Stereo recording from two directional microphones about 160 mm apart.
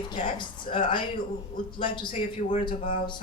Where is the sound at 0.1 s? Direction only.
30° left (ahead or behind).